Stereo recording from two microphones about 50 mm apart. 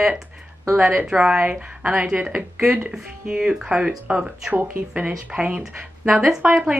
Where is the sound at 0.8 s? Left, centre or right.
Right.